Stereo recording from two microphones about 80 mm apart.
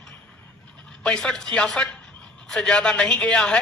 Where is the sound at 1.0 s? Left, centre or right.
Centre.